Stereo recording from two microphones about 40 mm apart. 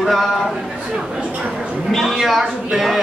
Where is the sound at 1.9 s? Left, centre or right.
Centre.